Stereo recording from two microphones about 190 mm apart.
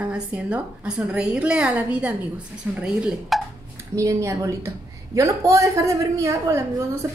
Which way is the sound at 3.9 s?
15° right (ahead or behind).